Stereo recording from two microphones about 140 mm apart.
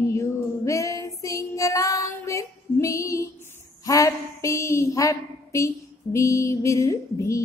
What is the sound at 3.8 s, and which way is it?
A woman's voice, 25° left (ahead or behind).